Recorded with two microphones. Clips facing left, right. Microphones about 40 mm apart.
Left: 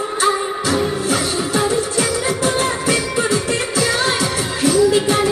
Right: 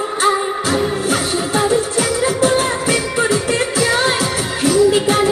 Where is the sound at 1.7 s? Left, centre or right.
Right.